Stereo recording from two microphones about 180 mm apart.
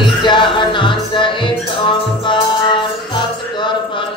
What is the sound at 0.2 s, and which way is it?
Music, 25° left (ahead or behind).